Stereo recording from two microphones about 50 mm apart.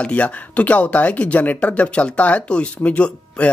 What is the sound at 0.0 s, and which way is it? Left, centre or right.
Speech, left.